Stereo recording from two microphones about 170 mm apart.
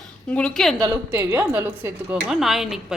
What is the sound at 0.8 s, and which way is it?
A woman's voice, 20° right (ahead or behind).